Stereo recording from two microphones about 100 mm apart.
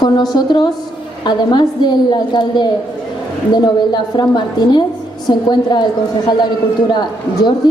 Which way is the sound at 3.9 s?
50° left (ahead or behind).